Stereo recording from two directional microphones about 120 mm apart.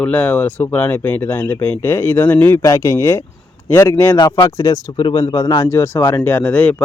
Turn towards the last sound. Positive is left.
turn(degrees=10)  # may be behind; listen again after turning